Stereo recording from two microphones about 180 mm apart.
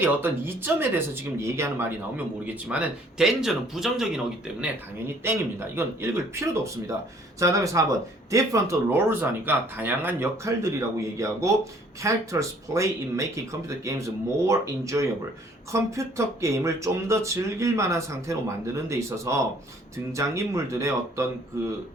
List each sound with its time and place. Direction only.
0.0 s speech: 10° right (ahead or behind)
4.6 s speech: 10° right (ahead or behind)